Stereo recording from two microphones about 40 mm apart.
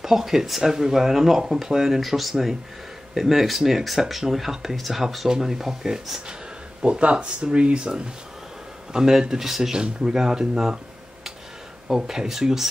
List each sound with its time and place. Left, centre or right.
0.0 s speech: centre
6.8 s speech: right
11.9 s speech: centre